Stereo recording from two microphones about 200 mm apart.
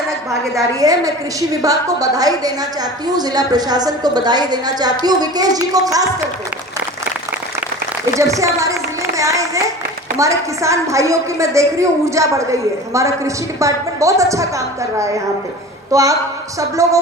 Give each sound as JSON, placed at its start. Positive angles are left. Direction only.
{"t": 0.5, "sound": "a woman's voice", "side_deg": -15}
{"t": 8.1, "sound": "a woman's voice", "side_deg": -15}